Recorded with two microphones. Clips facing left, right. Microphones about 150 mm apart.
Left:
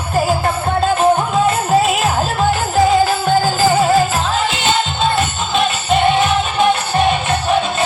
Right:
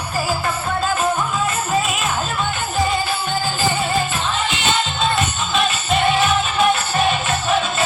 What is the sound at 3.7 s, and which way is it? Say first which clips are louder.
Music: left 8 dB; 40° left (ahead or behind).